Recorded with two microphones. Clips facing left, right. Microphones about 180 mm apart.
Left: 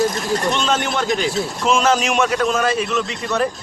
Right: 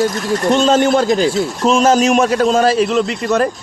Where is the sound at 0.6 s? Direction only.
40° right (ahead or behind).